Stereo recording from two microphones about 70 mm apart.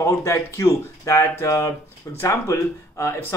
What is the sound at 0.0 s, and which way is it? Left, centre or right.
Speech, left.